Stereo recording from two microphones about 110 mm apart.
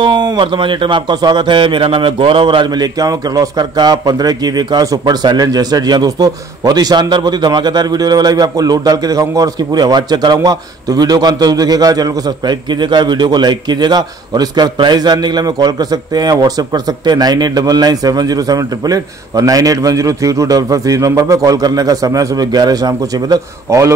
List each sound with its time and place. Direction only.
0.0 s a man's voice: 40° right (ahead or behind)